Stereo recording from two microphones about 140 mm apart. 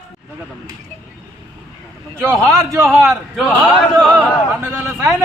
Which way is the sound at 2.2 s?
20° right (ahead or behind).